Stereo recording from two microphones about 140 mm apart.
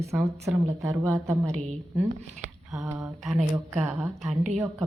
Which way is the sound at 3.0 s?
Centre (ahead or behind).